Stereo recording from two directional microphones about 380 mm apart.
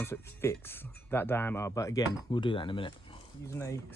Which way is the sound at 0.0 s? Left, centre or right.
Centre.